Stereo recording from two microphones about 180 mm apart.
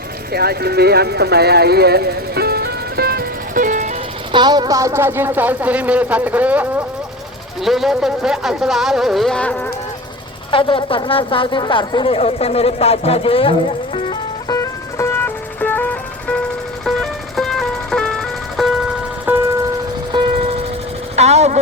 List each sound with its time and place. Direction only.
0.3 s speech: 60° right (ahead or behind); by 3.9 s 45° right (ahead or behind)
4.3 s speech: 25° right (ahead or behind); by 9.6 s 5° left (ahead or behind)
10.5 s a sound: 30° left (ahead or behind); by 16.4 s 10° left (ahead or behind)
16.8 s music: centre (ahead or behind)
19.3 s music: 10° right (ahead or behind)
21.2 s a sound: 35° right (ahead or behind)